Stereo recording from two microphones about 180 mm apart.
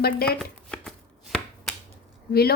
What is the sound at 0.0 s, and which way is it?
Speech, 60° left (ahead or behind).